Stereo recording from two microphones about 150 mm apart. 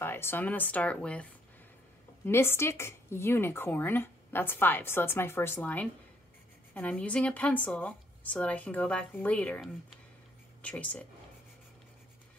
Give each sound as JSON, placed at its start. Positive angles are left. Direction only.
{"t": 0.0, "sound": "speech", "side_deg": 15}
{"t": 2.2, "sound": "speech", "side_deg": 15}